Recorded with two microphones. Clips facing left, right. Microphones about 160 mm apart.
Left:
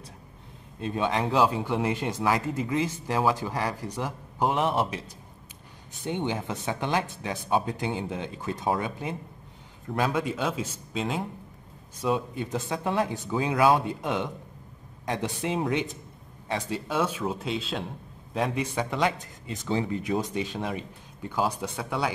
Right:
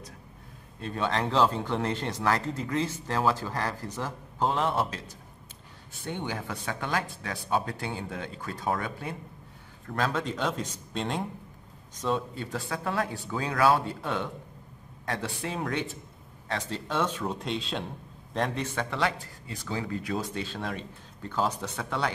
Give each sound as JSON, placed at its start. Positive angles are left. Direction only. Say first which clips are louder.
{"t": 0.7, "sound": "speech", "louder": "left 2 dB", "side_deg": 15}
{"t": 6.0, "sound": "speech", "louder": "left 4 dB", "side_deg": 20}